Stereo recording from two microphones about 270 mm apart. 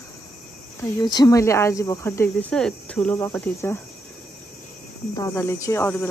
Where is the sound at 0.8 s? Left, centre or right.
Centre.